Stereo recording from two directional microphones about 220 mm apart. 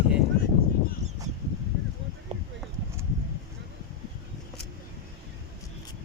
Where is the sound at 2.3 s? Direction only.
25° right (ahead or behind).